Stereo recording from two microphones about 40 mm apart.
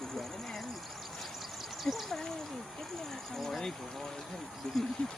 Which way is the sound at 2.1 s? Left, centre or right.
Centre.